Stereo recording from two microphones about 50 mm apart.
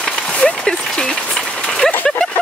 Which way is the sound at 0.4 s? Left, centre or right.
Left.